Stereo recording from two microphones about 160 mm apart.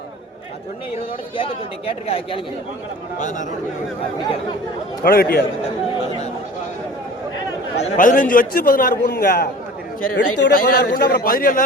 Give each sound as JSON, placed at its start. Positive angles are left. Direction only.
{"t": 1.9, "sound": "speech", "side_deg": 35}
{"t": 3.2, "sound": "speech", "side_deg": 50}
{"t": 5.0, "sound": "a man's voice", "side_deg": 70}
{"t": 7.8, "sound": "a man's voice", "side_deg": 55}